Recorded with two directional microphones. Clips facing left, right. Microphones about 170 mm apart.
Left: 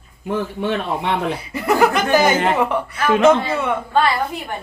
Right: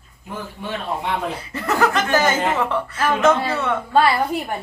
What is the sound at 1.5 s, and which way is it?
Speech, 15° left (ahead or behind).